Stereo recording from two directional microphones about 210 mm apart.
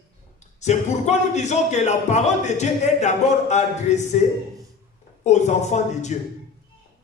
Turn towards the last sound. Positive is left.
turn(degrees=35)  # may be behind; listen again after turning